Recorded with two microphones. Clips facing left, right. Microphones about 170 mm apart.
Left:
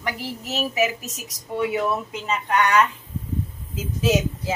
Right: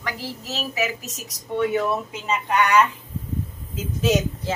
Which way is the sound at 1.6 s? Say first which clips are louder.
Right 2 dB; 5° left (ahead or behind).